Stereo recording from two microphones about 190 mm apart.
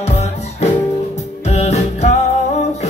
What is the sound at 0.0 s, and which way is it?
Music, 35° left (ahead or behind).